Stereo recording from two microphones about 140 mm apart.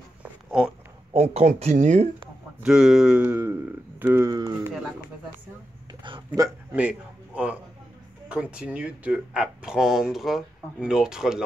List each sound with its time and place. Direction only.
0.2 s a sound: 5° right (ahead or behind)
1.1 s speech: 50° right (ahead or behind)
2.6 s speech: 5° right (ahead or behind)
4.0 s speech: 15° right (ahead or behind)
6.4 s speech: 25° right (ahead or behind)
6.7 s a man's voice: 10° right (ahead or behind)